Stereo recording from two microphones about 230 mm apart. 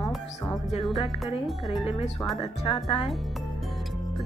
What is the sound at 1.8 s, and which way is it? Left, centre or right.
Speech, left.